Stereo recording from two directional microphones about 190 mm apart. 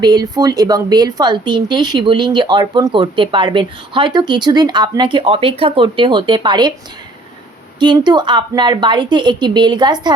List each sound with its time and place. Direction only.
0.0 s speech: 20° right (ahead or behind)
7.8 s speech: 25° right (ahead or behind)